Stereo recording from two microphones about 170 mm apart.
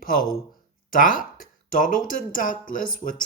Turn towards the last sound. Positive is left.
turn(degrees=55)  # may be behind; listen again after turning